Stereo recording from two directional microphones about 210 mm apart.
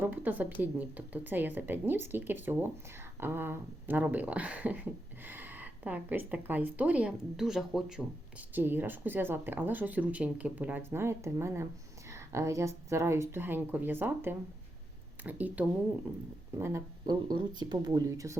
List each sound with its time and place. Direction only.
0.0 s speech: 10° right (ahead or behind)